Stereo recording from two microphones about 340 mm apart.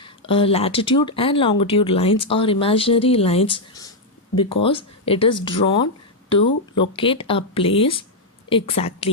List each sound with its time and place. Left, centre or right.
0.0 s speech: centre